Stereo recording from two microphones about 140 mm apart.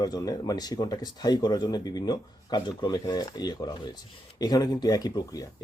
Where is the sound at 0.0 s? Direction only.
25° left (ahead or behind).